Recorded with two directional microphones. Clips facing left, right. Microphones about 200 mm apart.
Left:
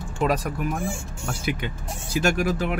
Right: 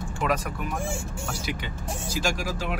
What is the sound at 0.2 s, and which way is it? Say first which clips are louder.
Speech: left 4 dB; 35° left (ahead or behind).